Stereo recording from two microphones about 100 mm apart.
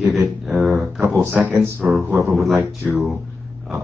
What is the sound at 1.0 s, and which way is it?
Speech, 25° right (ahead or behind).